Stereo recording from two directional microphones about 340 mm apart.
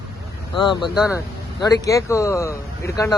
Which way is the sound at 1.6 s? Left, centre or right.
Centre.